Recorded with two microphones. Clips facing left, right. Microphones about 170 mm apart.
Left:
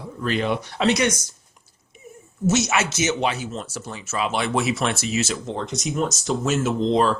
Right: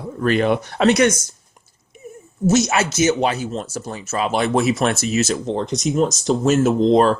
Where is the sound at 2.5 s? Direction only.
35° right (ahead or behind).